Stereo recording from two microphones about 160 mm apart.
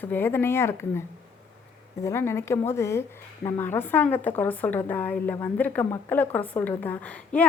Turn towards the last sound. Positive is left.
turn(degrees=10)  # may be behind; listen again after turning